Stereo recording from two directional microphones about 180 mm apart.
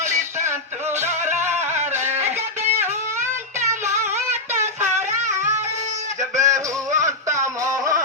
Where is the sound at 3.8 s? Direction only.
15° right (ahead or behind).